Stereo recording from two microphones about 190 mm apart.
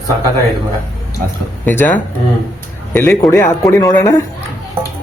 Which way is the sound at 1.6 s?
10° left (ahead or behind).